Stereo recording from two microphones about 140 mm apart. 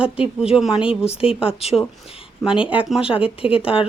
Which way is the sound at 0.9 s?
45° left (ahead or behind).